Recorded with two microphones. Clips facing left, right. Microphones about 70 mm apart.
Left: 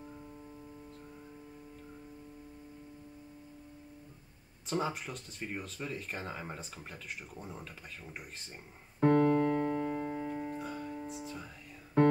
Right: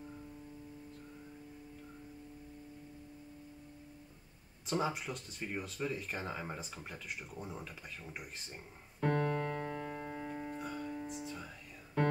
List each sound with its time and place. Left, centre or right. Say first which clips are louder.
4.6 s speech: left 1 dB; centre
9.0 s music: left 8 dB; left
9.8 s music: left 7 dB; left
10.3 s music: left 3 dB; centre